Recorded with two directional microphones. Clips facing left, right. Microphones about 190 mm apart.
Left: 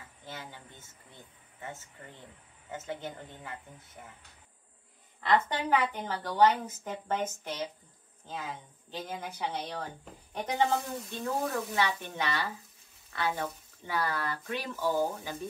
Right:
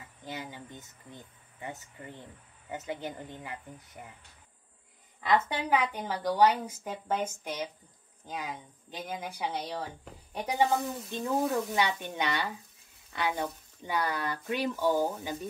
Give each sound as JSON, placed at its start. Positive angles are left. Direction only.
{"t": 0.2, "sound": "a sound", "side_deg": -15}
{"t": 2.7, "sound": "a woman's voice", "side_deg": -15}
{"t": 5.2, "sound": "a woman's voice", "side_deg": -10}
{"t": 11.1, "sound": "a woman's voice", "side_deg": -20}